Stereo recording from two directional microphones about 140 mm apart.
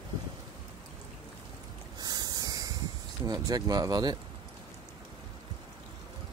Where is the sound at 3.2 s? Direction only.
30° right (ahead or behind).